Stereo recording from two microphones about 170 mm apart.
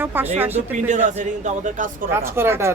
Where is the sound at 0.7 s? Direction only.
45° right (ahead or behind).